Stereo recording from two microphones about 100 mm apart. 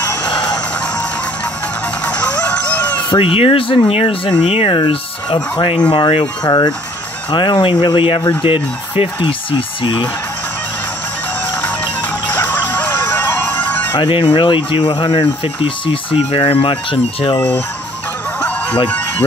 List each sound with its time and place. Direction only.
0.3 s music: 45° left (ahead or behind)
2.0 s music: 15° left (ahead or behind)
3.2 s speech: 65° left (ahead or behind)
4.7 s speech: 55° left (ahead or behind)
12.3 s music: 15° left (ahead or behind)
13.9 s speech: 60° left (ahead or behind)
15.4 s speech: 65° left (ahead or behind)